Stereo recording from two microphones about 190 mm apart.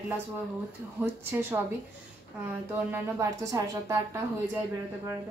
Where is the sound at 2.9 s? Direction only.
15° right (ahead or behind).